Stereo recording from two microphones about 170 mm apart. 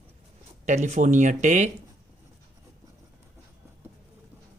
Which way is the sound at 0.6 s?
40° right (ahead or behind).